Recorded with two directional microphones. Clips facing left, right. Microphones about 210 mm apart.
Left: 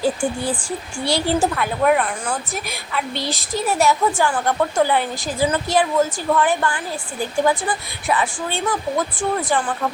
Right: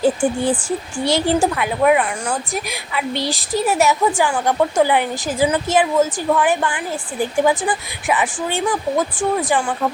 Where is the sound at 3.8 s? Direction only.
15° right (ahead or behind).